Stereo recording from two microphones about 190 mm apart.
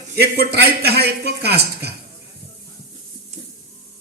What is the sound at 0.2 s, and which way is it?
A man's voice, 60° right (ahead or behind).